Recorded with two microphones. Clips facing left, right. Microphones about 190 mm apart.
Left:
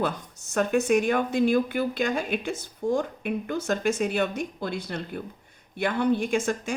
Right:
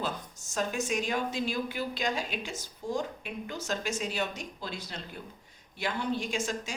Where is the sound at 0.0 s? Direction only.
60° left (ahead or behind).